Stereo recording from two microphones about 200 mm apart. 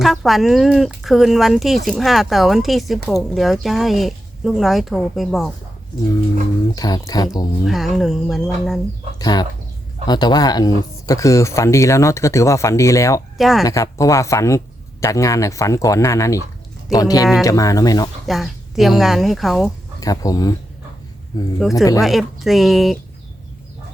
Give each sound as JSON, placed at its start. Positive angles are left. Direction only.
{"t": 0.0, "sound": "speech", "side_deg": 0}
{"t": 6.7, "sound": "speech", "side_deg": 20}
{"t": 7.6, "sound": "speech", "side_deg": 0}
{"t": 9.1, "sound": "speech", "side_deg": 20}
{"t": 13.3, "sound": "speech", "side_deg": 0}
{"t": 13.7, "sound": "speech", "side_deg": 15}
{"t": 18.3, "sound": "speech", "side_deg": 0}
{"t": 20.0, "sound": "speech", "side_deg": 20}
{"t": 21.6, "sound": "speech", "side_deg": 0}